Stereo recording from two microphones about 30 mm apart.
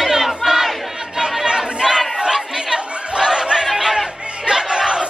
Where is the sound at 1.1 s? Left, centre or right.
Right.